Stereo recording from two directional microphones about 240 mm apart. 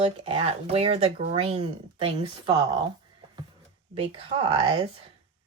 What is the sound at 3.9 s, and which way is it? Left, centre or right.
Speech, right.